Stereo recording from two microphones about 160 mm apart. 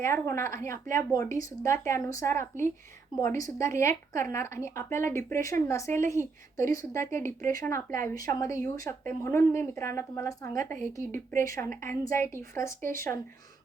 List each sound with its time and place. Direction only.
0.0 s a woman's voice: 15° left (ahead or behind)